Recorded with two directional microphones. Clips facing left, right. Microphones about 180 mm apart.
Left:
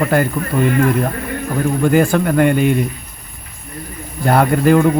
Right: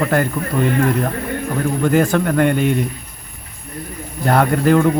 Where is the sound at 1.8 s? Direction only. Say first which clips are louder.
Left 2 dB; 10° left (ahead or behind).